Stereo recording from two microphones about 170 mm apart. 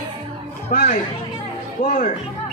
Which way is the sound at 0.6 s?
45° left (ahead or behind).